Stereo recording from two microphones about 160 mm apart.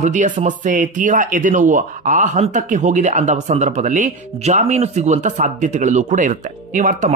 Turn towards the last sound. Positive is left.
turn(degrees=-50)  # may be behind; listen again after turning